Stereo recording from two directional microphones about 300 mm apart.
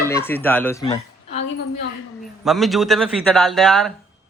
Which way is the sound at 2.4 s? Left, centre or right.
Centre.